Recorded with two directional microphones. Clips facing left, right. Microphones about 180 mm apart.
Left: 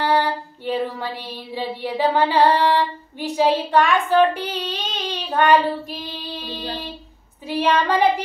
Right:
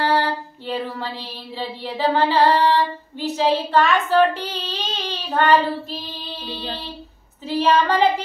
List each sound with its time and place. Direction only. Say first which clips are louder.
0.0 s female singing: even; 15° left (ahead or behind)
6.4 s child singing: right 1 dB; 15° left (ahead or behind)